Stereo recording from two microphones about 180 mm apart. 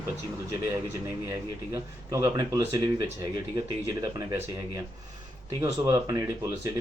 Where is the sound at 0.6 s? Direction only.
20° right (ahead or behind).